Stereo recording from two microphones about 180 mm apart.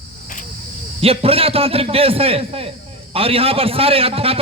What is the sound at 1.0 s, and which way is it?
A man's voice, 30° right (ahead or behind).